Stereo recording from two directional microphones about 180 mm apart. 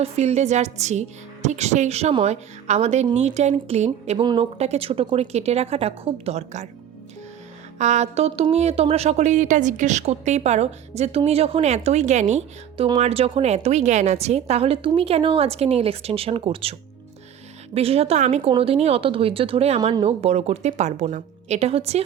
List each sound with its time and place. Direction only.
0.0 s speech: 35° right (ahead or behind)
7.8 s speech: 40° right (ahead or behind)
17.7 s speech: 35° right (ahead or behind)